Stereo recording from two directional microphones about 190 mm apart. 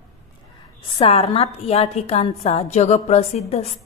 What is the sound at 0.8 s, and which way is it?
A woman's voice, 30° left (ahead or behind).